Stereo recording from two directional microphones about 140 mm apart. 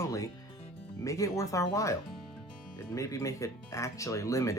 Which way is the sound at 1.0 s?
25° left (ahead or behind).